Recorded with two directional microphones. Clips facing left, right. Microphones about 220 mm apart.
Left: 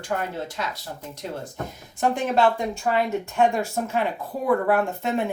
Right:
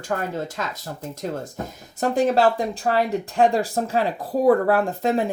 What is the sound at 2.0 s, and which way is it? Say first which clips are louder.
Speech: right 3 dB; 40° right (ahead or behind).